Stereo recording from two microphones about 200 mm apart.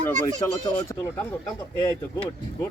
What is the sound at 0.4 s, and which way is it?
Speech, 15° left (ahead or behind).